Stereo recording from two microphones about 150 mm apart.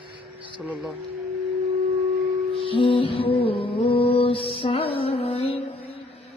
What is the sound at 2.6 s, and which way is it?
Music, 35° left (ahead or behind).